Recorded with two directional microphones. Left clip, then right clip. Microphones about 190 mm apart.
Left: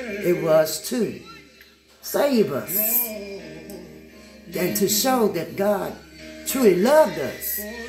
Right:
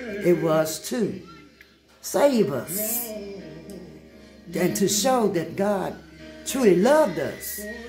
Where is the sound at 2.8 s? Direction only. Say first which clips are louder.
Left 2 dB; 20° left (ahead or behind).